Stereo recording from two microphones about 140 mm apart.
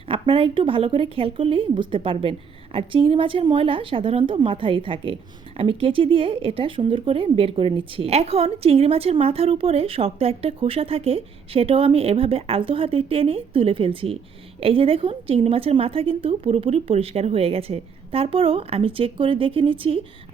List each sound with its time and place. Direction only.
0.1 s a woman's voice: 40° right (ahead or behind)